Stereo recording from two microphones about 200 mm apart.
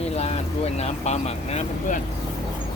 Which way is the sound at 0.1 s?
30° left (ahead or behind).